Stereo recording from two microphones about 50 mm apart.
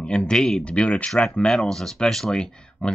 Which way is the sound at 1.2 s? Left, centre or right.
Centre.